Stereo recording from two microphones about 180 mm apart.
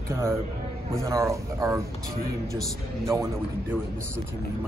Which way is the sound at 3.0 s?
15° right (ahead or behind).